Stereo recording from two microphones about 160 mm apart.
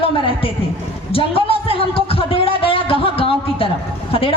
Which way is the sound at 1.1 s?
35° left (ahead or behind).